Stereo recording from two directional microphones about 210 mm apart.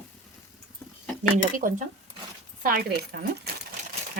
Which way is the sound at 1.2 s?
40° right (ahead or behind).